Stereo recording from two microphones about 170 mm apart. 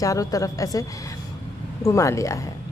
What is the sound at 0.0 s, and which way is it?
A woman's voice, 20° left (ahead or behind).